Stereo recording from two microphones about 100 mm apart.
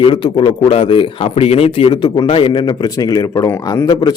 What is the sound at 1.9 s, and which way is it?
Speech, 50° left (ahead or behind).